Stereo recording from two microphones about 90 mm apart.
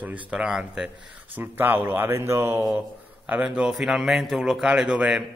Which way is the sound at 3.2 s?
15° right (ahead or behind).